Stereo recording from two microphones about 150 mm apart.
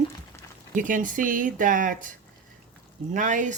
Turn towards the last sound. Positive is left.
turn(degrees=-55)  # may be behind; listen again after turning